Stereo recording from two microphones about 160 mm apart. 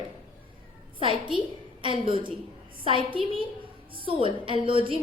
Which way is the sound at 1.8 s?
30° right (ahead or behind).